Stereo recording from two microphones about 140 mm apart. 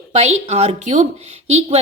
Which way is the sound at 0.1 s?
50° right (ahead or behind).